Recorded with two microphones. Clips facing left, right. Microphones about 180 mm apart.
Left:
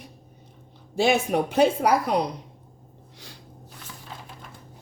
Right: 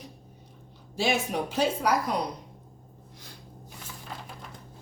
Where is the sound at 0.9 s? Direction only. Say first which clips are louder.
Left 6 dB; 55° left (ahead or behind).